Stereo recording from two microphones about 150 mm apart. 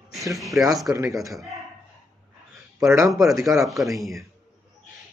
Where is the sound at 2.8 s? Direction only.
20° right (ahead or behind).